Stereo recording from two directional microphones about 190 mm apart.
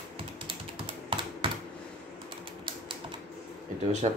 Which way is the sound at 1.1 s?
25° right (ahead or behind).